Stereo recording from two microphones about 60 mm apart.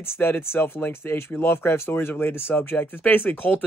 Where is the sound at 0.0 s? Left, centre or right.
Left.